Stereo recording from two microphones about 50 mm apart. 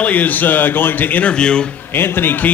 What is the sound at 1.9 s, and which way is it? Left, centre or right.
Speech, left.